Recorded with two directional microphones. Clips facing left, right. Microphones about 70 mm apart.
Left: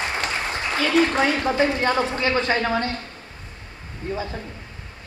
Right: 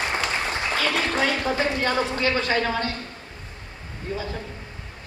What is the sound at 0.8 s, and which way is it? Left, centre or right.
A woman's voice, left.